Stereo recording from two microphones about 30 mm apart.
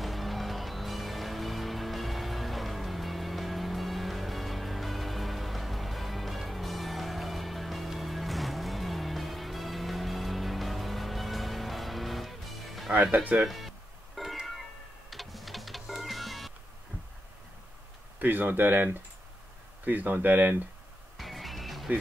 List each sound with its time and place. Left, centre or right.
0.0 s music: centre
13.0 s speech: right
13.4 s music: centre
15.0 s pigeon: centre
15.9 s music: centre
18.2 s speech: right
21.2 s music: centre